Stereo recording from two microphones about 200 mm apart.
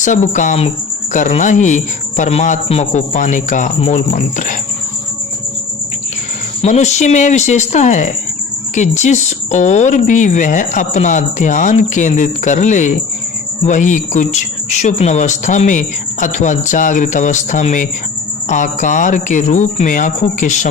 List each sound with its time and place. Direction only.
0.0 s speech: 40° left (ahead or behind)
6.6 s speech: 35° left (ahead or behind)